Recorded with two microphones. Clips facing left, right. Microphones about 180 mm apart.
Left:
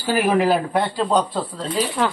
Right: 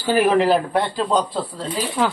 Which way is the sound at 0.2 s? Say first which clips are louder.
Right 2 dB; centre (ahead or behind).